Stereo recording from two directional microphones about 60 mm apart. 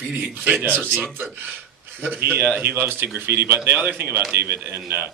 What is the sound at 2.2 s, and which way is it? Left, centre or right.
A man's voice, right.